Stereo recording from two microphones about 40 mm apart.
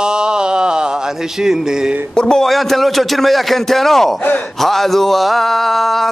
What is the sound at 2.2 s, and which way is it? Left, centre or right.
Speech, centre.